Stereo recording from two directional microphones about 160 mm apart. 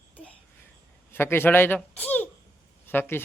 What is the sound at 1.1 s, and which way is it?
A man's voice, 15° left (ahead or behind).